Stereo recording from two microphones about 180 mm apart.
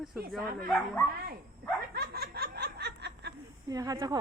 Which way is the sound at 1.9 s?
60° right (ahead or behind).